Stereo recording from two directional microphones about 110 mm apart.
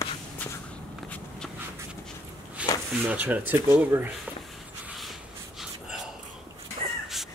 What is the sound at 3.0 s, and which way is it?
Speech, 15° right (ahead or behind).